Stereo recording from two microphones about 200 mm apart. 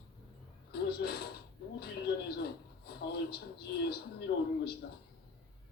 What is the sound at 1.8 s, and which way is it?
A man's voice, 50° left (ahead or behind).